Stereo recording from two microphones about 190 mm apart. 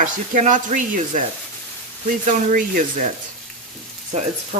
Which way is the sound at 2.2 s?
45° right (ahead or behind).